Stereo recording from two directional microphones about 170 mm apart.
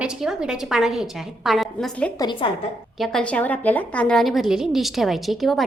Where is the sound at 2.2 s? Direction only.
30° left (ahead or behind).